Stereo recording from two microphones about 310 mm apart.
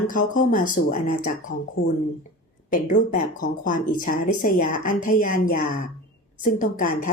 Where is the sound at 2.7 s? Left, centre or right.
Left.